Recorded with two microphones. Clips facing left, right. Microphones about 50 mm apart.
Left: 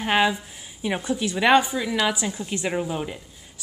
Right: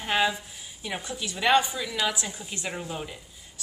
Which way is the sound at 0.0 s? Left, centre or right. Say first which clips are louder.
Left 4 dB; left.